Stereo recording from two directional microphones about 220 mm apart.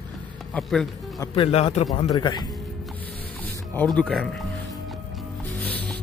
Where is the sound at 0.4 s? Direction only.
Centre (ahead or behind).